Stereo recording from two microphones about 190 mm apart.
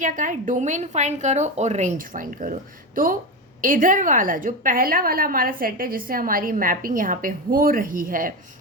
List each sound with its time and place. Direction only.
0.0 s a woman's voice: 40° right (ahead or behind)